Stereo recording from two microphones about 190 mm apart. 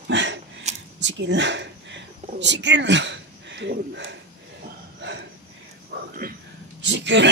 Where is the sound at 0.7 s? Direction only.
35° right (ahead or behind).